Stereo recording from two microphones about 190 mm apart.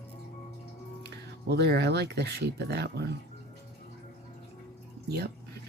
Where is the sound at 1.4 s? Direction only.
60° right (ahead or behind).